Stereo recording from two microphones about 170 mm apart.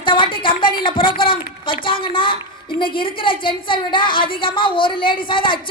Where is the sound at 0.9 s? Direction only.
30° left (ahead or behind).